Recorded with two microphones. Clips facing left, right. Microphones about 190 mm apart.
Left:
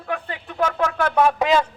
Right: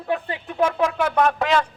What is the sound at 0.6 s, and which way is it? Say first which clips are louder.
Speech: right 1 dB; 10° right (ahead or behind).